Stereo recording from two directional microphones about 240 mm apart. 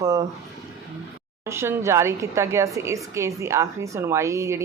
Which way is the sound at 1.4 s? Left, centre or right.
Centre.